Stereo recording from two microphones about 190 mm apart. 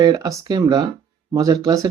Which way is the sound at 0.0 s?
20° right (ahead or behind).